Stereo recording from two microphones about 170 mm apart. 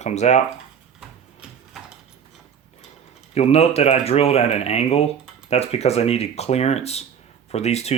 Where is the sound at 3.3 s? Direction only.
40° left (ahead or behind).